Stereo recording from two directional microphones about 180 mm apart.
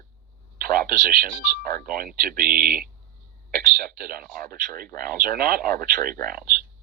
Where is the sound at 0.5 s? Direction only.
55° right (ahead or behind).